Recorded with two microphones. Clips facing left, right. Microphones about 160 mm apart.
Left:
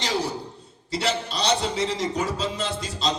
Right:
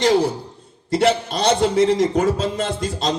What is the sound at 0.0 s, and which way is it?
A man's voice, 50° right (ahead or behind).